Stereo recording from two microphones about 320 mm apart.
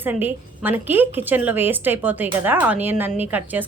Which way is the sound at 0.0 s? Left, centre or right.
Centre.